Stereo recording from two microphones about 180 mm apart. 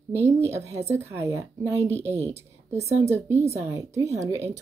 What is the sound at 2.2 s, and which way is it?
Speech, 35° right (ahead or behind).